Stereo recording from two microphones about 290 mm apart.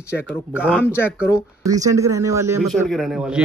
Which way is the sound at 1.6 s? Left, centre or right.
Centre.